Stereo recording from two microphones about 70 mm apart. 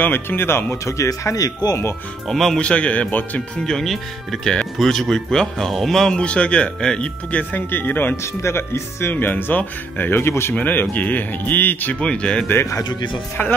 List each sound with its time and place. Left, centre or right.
0.0 s speech: left
2.2 s speech: centre
2.6 s speech: centre
3.6 s speech: centre; by 8.2 s left
8.2 s speech: left
9.1 s speech: left
10.5 s speech: left
12.4 s speech: left